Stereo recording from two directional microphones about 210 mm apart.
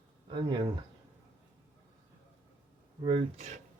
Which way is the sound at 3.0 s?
25° right (ahead or behind).